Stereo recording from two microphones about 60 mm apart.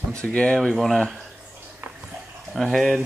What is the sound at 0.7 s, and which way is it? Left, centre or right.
Speech, centre.